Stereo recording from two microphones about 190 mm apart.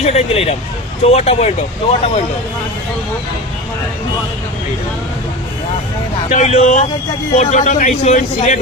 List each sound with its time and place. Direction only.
0.0 s speech: 35° left (ahead or behind)
6.3 s speech: 35° left (ahead or behind)